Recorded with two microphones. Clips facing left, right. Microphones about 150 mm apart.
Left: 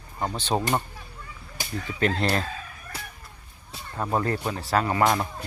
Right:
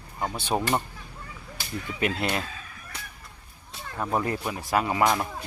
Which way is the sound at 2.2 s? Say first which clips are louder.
Left 3 dB; 5° right (ahead or behind).